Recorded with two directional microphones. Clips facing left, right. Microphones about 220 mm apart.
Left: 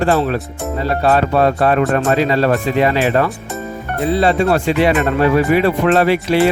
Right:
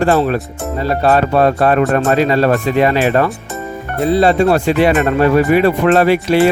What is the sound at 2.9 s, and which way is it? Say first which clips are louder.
Speech: right 2 dB; 50° right (ahead or behind).